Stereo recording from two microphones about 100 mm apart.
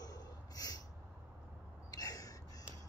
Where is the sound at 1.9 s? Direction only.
40° left (ahead or behind).